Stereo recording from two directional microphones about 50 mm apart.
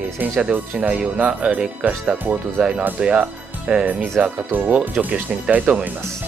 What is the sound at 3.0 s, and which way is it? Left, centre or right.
Speech, centre.